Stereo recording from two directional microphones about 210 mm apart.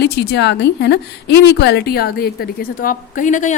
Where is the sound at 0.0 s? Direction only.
55° left (ahead or behind).